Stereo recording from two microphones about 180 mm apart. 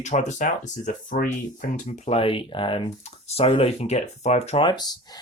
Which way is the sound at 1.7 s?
35° left (ahead or behind).